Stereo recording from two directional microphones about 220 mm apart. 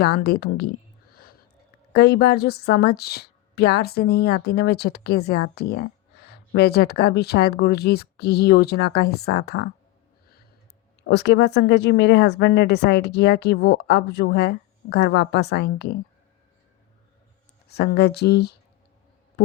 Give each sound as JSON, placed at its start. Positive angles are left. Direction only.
{"t": 0.0, "sound": "a woman's voice", "side_deg": 45}
{"t": 1.1, "sound": "a sound", "side_deg": 45}
{"t": 1.9, "sound": "a woman's voice", "side_deg": 50}
{"t": 11.0, "sound": "a woman's voice", "side_deg": 50}
{"t": 17.7, "sound": "a woman's voice", "side_deg": 50}